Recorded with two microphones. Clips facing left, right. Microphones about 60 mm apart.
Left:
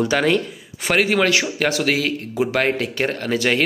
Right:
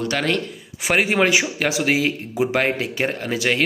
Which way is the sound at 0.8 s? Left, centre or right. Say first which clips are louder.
Left 1 dB; centre.